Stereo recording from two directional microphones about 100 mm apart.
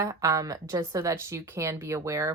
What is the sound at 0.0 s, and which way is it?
Speech, 30° right (ahead or behind).